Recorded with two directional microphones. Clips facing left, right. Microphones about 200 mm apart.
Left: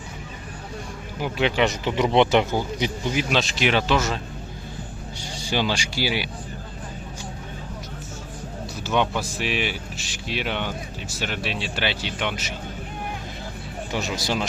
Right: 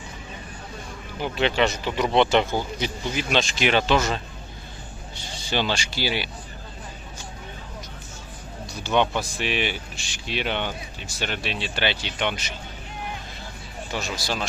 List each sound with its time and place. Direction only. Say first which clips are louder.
1.2 s speech: left 1 dB; 10° left (ahead or behind)
3.2 s speech: right 3 dB; centre (ahead or behind)
8.8 s speech: right 1 dB; 5° left (ahead or behind)
13.9 s speech: left 3 dB; 20° left (ahead or behind)